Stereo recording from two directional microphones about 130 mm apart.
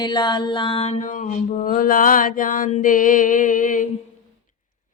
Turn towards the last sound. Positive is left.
turn(degrees=90)